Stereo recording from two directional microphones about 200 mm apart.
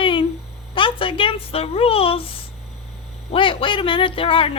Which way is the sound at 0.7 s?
25° left (ahead or behind).